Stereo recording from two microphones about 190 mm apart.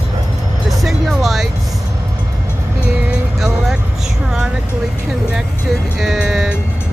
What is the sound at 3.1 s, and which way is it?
Music, centre (ahead or behind).